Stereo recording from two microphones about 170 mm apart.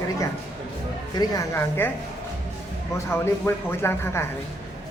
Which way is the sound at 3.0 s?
15° left (ahead or behind).